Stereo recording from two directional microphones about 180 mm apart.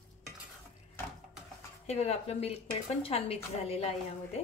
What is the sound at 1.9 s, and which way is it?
Speech, 35° left (ahead or behind).